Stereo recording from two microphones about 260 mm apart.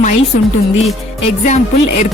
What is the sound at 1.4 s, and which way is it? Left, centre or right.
Speech, left.